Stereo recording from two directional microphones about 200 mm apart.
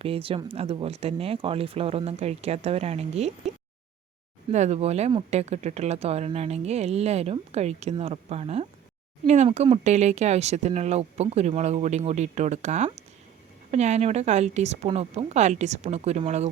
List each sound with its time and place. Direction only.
0.0 s speech: 30° right (ahead or behind)
4.5 s speech: 35° right (ahead or behind)